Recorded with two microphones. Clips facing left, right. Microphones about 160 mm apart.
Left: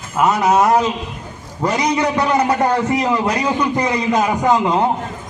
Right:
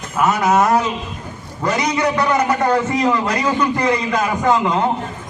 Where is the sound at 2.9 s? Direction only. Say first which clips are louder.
Even; 10° left (ahead or behind).